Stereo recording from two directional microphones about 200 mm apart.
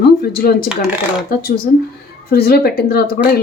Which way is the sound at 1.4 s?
50° left (ahead or behind).